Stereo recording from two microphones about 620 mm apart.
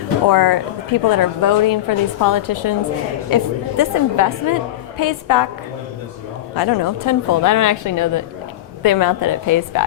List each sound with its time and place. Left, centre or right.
0.3 s a woman's voice: left
6.6 s a woman's voice: left